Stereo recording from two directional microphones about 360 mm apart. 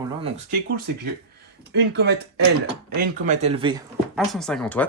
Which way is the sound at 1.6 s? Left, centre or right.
Right.